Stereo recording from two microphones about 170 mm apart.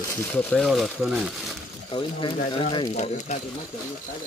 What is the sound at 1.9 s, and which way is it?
A woman's voice, 30° left (ahead or behind).